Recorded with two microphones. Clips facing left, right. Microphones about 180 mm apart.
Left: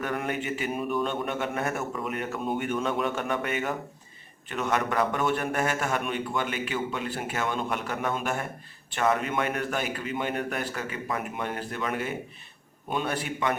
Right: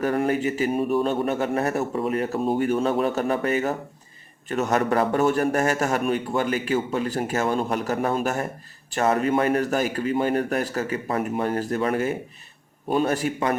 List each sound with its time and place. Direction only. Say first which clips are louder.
0.0 s a man's voice: right 8 dB; 35° right (ahead or behind)